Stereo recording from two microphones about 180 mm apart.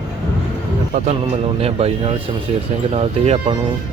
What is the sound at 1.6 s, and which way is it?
Speech, 35° right (ahead or behind).